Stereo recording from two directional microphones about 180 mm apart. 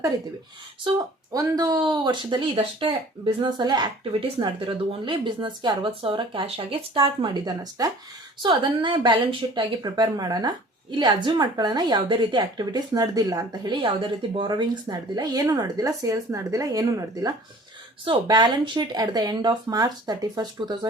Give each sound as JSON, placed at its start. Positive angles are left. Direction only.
{"t": 0.9, "sound": "speech", "side_deg": -20}